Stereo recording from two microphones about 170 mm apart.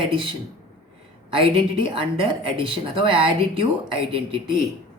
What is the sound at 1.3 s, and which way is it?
Speech, 30° right (ahead or behind).